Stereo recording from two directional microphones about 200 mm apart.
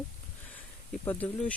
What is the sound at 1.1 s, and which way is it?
Speech, 10° left (ahead or behind).